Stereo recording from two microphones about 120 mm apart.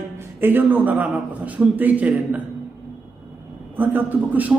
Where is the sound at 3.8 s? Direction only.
15° right (ahead or behind).